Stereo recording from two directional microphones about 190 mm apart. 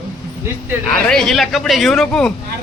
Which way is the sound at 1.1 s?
Centre (ahead or behind).